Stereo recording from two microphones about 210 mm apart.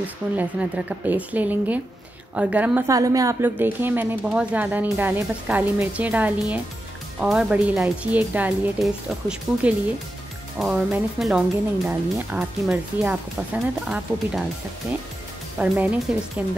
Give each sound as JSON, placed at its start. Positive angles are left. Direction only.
{"t": 0.0, "sound": "speech", "side_deg": -5}
{"t": 15.6, "sound": "speech", "side_deg": -5}